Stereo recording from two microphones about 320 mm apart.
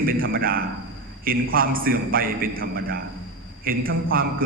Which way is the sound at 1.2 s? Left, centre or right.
Right.